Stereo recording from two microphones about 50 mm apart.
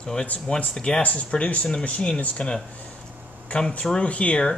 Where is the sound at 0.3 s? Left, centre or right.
Left.